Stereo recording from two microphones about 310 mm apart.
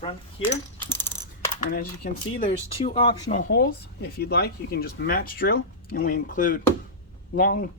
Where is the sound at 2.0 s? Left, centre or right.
Left.